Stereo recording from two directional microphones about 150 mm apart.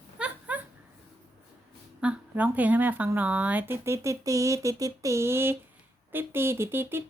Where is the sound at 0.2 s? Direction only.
10° right (ahead or behind).